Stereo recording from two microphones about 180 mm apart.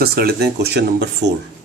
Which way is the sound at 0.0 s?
60° right (ahead or behind).